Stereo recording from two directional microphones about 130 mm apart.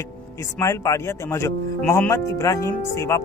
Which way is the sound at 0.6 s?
25° left (ahead or behind).